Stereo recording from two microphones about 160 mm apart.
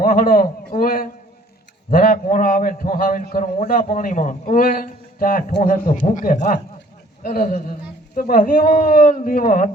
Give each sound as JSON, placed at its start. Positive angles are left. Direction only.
{"t": 0.0, "sound": "a man's voice", "side_deg": 60}